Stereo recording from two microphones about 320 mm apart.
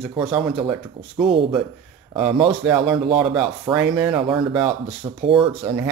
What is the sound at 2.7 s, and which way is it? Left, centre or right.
Speech, centre.